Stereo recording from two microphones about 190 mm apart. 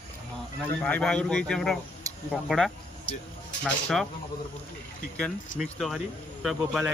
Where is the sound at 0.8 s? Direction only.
10° left (ahead or behind).